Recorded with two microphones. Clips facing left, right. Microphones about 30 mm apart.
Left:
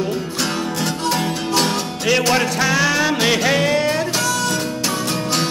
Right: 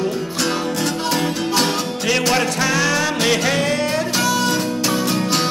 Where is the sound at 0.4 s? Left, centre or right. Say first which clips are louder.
Right 3 dB; centre.